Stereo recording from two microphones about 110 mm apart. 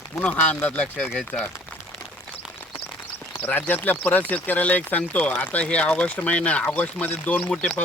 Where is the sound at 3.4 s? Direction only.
15° left (ahead or behind).